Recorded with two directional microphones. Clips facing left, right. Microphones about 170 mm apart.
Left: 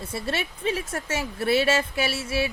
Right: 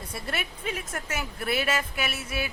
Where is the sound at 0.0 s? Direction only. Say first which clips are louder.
Left 5 dB; 25° left (ahead or behind).